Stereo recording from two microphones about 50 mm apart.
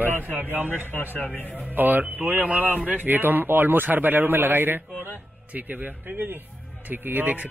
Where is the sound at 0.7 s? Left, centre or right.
Left.